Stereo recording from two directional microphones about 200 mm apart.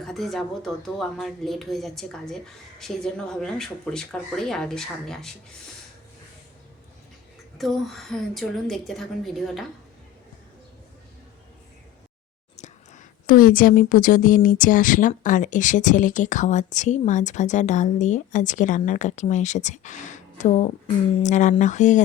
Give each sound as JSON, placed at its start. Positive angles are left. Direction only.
{"t": 0.0, "sound": "speech", "side_deg": 0}
{"t": 7.6, "sound": "speech", "side_deg": 0}
{"t": 12.5, "sound": "speech", "side_deg": 35}